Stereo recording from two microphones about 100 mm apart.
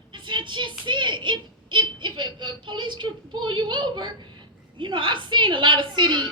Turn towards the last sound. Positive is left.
turn(degrees=-50)  # may be behind; listen again after turning